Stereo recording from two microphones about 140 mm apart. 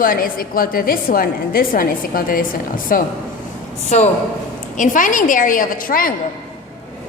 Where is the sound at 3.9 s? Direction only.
55° left (ahead or behind).